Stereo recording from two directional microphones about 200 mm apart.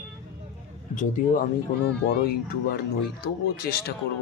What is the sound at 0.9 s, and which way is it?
Speech, 40° left (ahead or behind).